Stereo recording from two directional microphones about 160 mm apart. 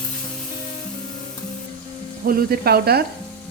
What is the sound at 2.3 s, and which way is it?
Frying, 70° right (ahead or behind).